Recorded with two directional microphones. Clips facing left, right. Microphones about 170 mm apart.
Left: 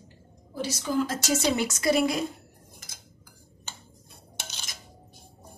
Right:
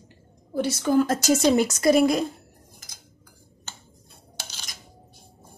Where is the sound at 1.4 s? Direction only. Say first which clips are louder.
Right 6 dB; 45° right (ahead or behind).